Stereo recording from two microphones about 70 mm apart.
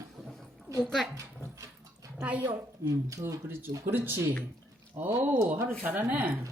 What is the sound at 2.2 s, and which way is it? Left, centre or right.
Speech, right.